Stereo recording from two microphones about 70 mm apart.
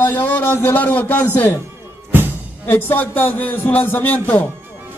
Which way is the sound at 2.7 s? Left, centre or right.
Left.